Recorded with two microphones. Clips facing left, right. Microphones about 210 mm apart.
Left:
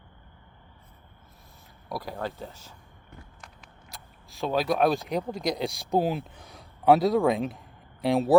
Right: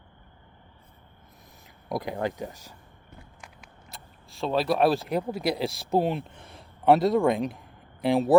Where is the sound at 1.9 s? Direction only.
15° right (ahead or behind).